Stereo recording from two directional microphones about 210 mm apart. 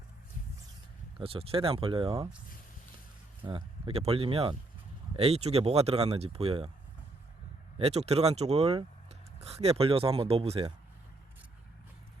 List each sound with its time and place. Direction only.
1.2 s speech: 25° right (ahead or behind)
3.4 s speech: 25° right (ahead or behind)
7.8 s speech: 30° right (ahead or behind)